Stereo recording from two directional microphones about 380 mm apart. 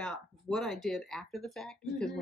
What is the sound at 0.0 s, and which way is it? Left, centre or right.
Speech, centre.